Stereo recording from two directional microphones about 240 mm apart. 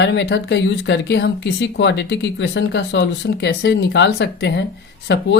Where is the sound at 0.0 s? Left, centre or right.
Left.